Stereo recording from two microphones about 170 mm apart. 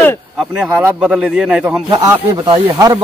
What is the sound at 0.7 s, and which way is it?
Speech, 5° right (ahead or behind).